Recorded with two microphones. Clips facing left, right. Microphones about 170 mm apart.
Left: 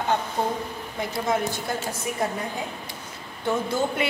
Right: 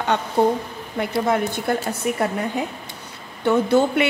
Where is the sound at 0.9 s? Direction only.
60° right (ahead or behind).